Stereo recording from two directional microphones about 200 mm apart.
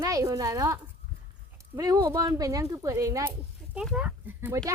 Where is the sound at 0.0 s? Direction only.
15° right (ahead or behind).